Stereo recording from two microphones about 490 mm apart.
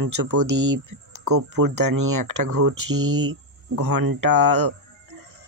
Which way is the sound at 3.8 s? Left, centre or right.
Right.